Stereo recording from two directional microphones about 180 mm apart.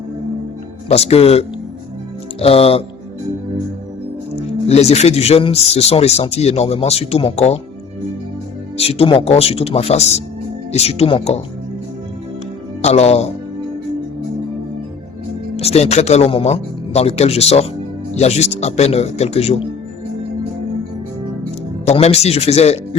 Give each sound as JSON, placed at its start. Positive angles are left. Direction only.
{"t": 0.9, "sound": "speech", "side_deg": 35}
{"t": 4.4, "sound": "speech", "side_deg": 35}
{"t": 8.8, "sound": "speech", "side_deg": 35}
{"t": 12.8, "sound": "speech", "side_deg": 35}
{"t": 15.5, "sound": "speech", "side_deg": 35}
{"t": 21.8, "sound": "speech", "side_deg": 35}